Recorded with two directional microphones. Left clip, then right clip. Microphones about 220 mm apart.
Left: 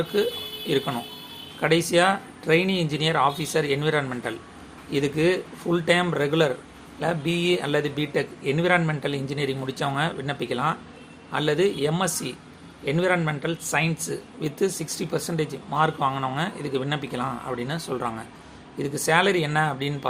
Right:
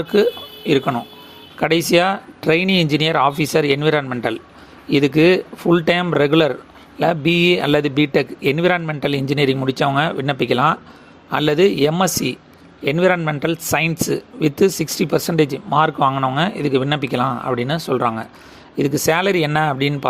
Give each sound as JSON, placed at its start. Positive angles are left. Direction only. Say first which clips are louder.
{"t": 0.1, "sound": "speech", "louder": "right 12 dB", "side_deg": -35}